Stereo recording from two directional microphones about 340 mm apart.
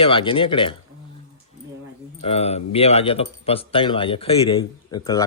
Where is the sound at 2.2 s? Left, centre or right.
Centre.